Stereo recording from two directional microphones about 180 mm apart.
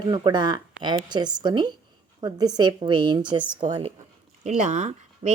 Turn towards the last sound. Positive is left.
turn(degrees=-40)  # may be behind; listen again after turning